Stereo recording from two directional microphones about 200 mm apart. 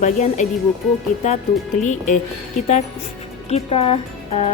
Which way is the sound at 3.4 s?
30° left (ahead or behind).